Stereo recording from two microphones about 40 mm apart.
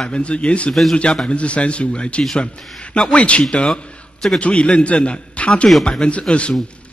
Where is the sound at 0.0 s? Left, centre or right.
Left.